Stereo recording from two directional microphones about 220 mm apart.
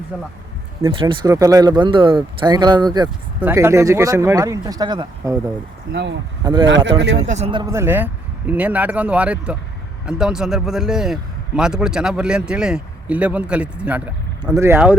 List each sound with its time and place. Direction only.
0.9 s speech: 25° right (ahead or behind)
5.9 s speech: 50° right (ahead or behind)
6.4 s speech: 20° right (ahead or behind)
6.7 s speech: 55° right (ahead or behind)
7.3 s a man's voice: 30° right (ahead or behind); by 14.9 s 10° right (ahead or behind)